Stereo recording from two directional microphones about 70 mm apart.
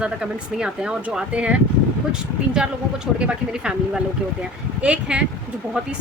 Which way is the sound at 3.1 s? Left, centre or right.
Centre.